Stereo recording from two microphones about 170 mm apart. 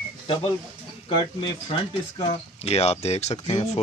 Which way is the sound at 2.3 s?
35° left (ahead or behind).